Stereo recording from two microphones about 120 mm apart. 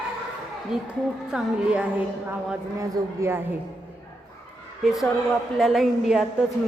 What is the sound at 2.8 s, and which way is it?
Speech, 20° right (ahead or behind).